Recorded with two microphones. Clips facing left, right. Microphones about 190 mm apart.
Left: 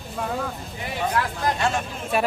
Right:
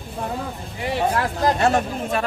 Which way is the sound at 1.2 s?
35° right (ahead or behind).